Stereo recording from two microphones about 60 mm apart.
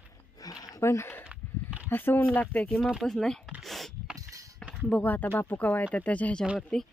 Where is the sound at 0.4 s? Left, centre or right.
Left.